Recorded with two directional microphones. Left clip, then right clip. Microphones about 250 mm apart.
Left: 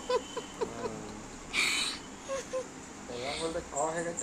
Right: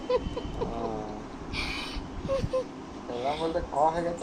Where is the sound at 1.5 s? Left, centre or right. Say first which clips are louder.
Left 5 dB; centre.